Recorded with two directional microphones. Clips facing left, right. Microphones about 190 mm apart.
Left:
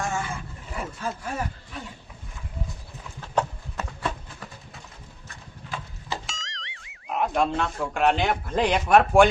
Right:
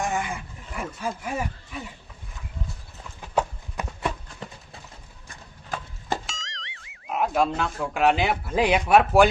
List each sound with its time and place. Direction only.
0.0 s a sound: 15° right (ahead or behind)
0.8 s speech: 10° right (ahead or behind)
3.2 s horse: 15° right (ahead or behind)
4.4 s pigeon: 25° right (ahead or behind)
6.2 s speech: centre (ahead or behind)